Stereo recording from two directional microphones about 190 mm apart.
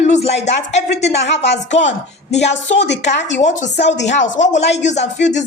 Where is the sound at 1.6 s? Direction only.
40° left (ahead or behind).